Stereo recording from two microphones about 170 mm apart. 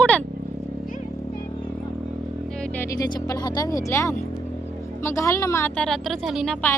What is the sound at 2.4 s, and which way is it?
A woman's voice, 5° left (ahead or behind).